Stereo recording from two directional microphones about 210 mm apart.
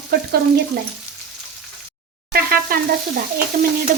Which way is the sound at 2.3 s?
45° right (ahead or behind).